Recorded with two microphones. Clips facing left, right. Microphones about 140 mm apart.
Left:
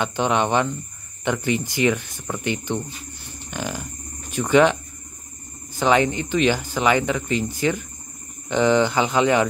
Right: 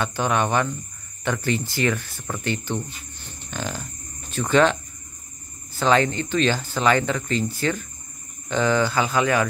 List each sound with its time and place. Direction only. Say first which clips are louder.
0.0 s speech: left 2 dB; 20° left (ahead or behind)
3.4 s a sound: left 1 dB; 15° left (ahead or behind)
5.8 s speech: left 1 dB; 15° left (ahead or behind)